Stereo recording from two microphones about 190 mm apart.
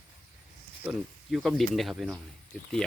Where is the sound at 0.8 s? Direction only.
5° right (ahead or behind).